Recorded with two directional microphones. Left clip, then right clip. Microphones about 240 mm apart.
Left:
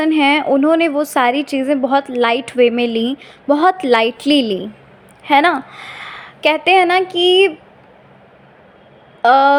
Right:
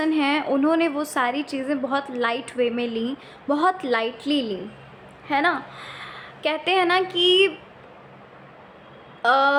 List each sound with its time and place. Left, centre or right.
0.0 s a woman's voice: left
9.2 s a woman's voice: left